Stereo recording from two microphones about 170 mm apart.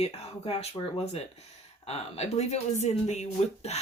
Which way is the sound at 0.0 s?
40° left (ahead or behind).